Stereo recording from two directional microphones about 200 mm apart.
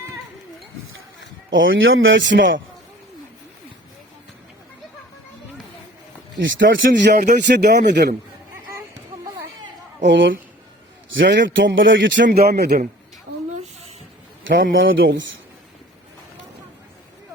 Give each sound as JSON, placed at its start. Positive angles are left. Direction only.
{"t": 1.5, "sound": "a man's voice", "side_deg": -70}
{"t": 6.4, "sound": "a man's voice", "side_deg": -65}
{"t": 7.1, "sound": "speech", "side_deg": -40}
{"t": 7.4, "sound": "a man's voice", "side_deg": -55}
{"t": 9.2, "sound": "a sound", "side_deg": -15}
{"t": 10.0, "sound": "a man's voice", "side_deg": -65}
{"t": 14.4, "sound": "a man's voice", "side_deg": -70}